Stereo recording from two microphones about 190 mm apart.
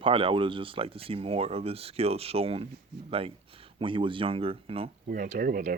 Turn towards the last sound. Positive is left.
turn(degrees=-50)  # may be behind; listen again after turning